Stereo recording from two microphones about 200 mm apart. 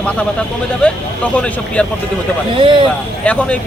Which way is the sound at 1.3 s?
5° left (ahead or behind).